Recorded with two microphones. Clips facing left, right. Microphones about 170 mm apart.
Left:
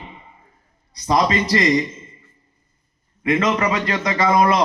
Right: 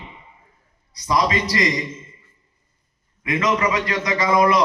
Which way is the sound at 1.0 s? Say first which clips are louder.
Left 2 dB; 30° left (ahead or behind).